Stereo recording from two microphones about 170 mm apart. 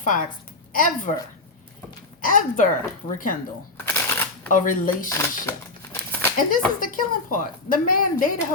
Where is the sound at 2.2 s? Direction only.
50° left (ahead or behind).